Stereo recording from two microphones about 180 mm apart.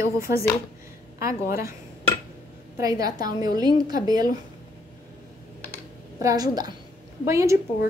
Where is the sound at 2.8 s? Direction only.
20° right (ahead or behind).